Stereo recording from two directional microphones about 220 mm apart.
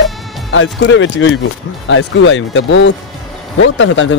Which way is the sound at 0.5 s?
60° left (ahead or behind).